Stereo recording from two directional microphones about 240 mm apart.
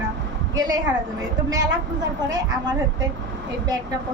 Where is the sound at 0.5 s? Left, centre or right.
Centre.